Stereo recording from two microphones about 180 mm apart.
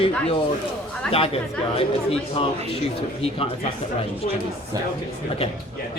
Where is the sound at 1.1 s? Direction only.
30° left (ahead or behind).